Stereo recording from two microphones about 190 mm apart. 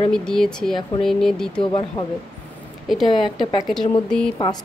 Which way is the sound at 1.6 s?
25° left (ahead or behind).